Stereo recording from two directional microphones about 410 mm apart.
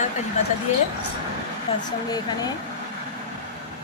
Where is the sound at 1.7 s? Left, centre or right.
Centre.